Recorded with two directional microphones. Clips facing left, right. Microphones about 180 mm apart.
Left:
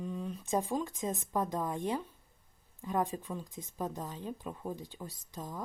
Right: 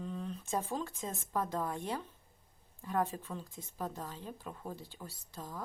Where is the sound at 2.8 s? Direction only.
15° left (ahead or behind).